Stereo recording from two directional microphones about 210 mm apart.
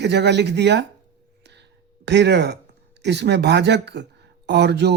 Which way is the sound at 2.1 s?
55° right (ahead or behind).